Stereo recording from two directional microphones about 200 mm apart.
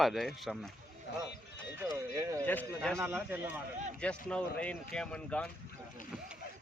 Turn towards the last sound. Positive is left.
turn(degrees=5)  # may be behind; listen again after turning